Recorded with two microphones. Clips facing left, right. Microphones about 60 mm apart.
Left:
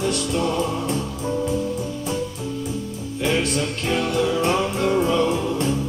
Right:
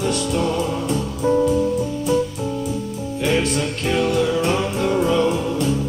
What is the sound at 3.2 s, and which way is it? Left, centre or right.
Music, right.